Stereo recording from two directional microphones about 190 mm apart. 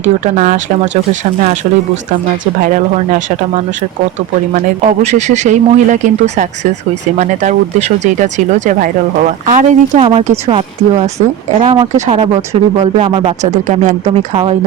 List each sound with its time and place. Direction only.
0.0 s speech: 40° right (ahead or behind)
2.6 s speech: 45° right (ahead or behind)
4.5 s speech: 40° right (ahead or behind)
10.0 s speech: 30° right (ahead or behind)